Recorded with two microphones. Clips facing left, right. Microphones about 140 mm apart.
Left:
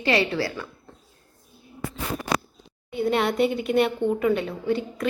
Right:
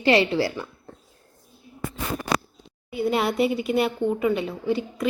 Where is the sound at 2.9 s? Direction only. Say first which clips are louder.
Even; 5° right (ahead or behind).